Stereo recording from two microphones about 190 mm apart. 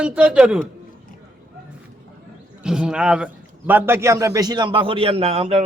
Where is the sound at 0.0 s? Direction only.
5° right (ahead or behind).